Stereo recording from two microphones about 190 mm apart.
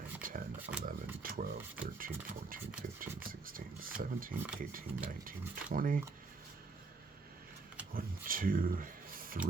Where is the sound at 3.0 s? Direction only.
50° right (ahead or behind).